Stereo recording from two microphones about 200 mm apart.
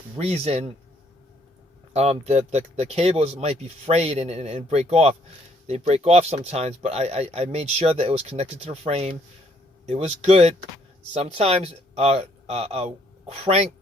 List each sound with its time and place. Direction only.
0.2 s speech: 30° right (ahead or behind)
1.9 s speech: 30° right (ahead or behind)